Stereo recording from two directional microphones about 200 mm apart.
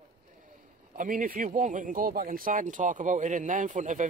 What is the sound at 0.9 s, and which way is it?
Speech, 45° right (ahead or behind).